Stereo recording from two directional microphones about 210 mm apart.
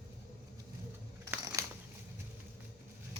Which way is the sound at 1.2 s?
15° right (ahead or behind).